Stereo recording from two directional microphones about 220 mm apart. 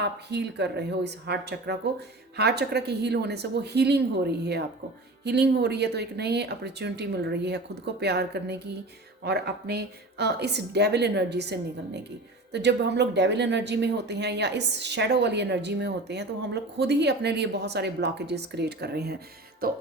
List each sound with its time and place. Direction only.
0.0 s speech: 50° right (ahead or behind)